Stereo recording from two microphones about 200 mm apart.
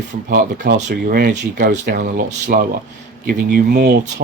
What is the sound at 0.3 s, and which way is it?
Speech, 50° right (ahead or behind).